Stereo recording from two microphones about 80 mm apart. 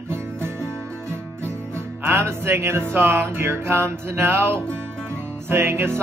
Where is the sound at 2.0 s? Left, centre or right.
Right.